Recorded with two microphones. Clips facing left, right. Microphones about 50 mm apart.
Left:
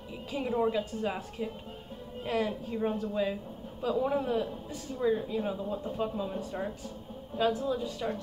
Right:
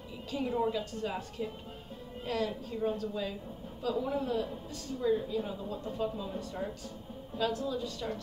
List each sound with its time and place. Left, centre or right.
0.3 s speech: centre